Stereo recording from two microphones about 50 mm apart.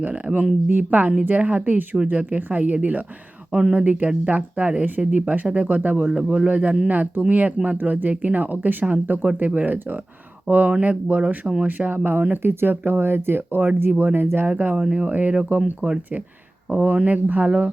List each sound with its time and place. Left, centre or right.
0.8 s speech: right
3.5 s speech: centre
3.8 s speech: right
6.2 s speech: centre
6.5 s speech: right
7.8 s speech: right
11.9 s speech: right
14.4 s speech: right
14.8 s speech: centre
15.0 s speech: right